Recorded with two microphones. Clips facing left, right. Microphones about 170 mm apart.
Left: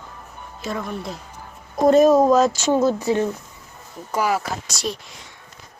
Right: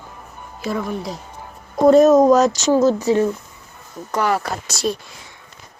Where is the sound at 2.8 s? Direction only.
40° right (ahead or behind).